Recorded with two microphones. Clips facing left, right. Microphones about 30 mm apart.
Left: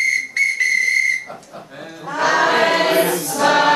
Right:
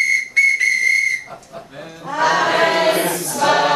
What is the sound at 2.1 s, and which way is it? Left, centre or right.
Choir, centre.